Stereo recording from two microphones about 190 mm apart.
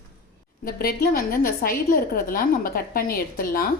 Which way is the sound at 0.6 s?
50° left (ahead or behind).